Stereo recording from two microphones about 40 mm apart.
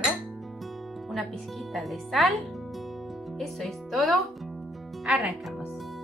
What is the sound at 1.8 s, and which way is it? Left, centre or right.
Speech, centre.